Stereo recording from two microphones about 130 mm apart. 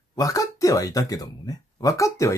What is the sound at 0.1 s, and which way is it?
Speech, 25° left (ahead or behind).